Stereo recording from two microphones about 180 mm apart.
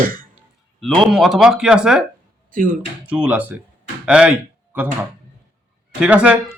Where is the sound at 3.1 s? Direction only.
10° right (ahead or behind).